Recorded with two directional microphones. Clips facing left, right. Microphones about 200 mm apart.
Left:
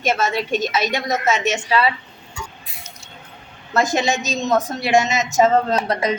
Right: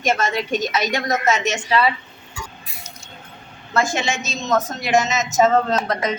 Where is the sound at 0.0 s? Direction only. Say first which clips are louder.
Left 1 dB; 5° left (ahead or behind).